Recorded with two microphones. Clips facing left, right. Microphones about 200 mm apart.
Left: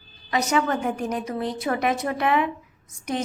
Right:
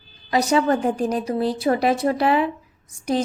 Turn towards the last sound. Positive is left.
turn(degrees=-30)  # may be behind; listen again after turning